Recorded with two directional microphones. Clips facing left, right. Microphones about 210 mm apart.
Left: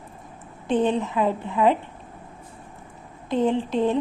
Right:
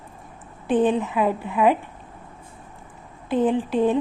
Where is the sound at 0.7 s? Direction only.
15° right (ahead or behind).